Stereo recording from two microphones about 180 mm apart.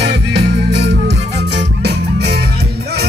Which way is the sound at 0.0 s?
65° right (ahead or behind).